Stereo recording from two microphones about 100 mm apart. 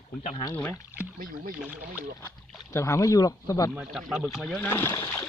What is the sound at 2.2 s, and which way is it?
Speech, 30° left (ahead or behind).